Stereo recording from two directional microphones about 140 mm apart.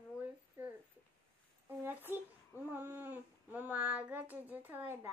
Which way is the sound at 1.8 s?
15° right (ahead or behind).